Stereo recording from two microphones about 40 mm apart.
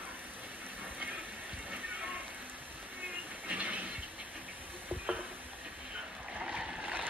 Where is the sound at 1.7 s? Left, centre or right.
Right.